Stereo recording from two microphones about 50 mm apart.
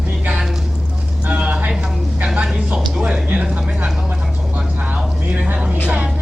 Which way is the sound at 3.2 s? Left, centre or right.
Right.